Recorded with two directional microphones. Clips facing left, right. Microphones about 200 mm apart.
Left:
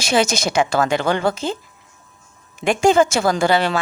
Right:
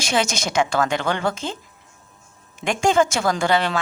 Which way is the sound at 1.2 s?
35° left (ahead or behind).